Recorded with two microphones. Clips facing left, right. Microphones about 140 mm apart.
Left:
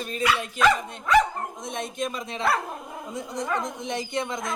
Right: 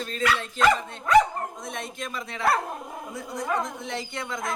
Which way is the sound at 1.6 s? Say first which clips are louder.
Left 4 dB; 20° left (ahead or behind).